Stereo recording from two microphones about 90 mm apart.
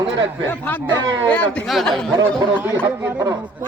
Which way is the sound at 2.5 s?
25° right (ahead or behind).